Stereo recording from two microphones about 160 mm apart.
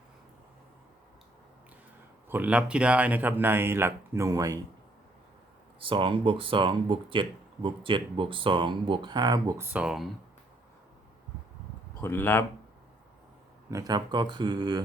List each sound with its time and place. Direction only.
2.3 s speech: 10° right (ahead or behind)
5.8 s speech: 35° right (ahead or behind)
9.6 s speech: 5° right (ahead or behind)
12.0 s speech: 15° left (ahead or behind)
13.7 s speech: 20° right (ahead or behind)